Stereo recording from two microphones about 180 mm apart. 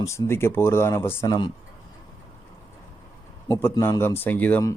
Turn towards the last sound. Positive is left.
turn(degrees=10)  # may be behind; listen again after turning